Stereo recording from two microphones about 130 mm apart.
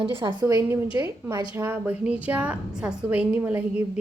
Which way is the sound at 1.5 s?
15° right (ahead or behind).